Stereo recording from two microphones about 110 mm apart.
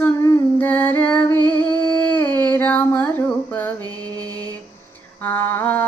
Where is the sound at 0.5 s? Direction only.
15° left (ahead or behind).